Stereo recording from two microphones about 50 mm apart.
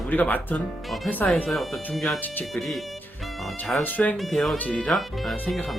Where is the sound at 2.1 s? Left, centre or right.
Left.